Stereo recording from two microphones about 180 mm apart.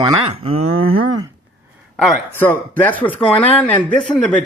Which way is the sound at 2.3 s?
10° left (ahead or behind).